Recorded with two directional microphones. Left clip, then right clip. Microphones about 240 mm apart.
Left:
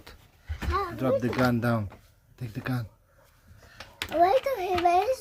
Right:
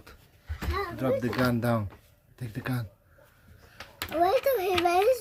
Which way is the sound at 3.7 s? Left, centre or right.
Left.